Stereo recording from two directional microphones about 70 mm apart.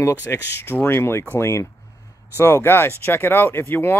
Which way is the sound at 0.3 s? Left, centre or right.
Left.